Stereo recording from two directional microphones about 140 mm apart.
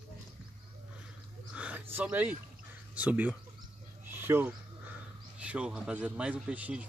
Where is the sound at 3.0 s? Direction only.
10° right (ahead or behind).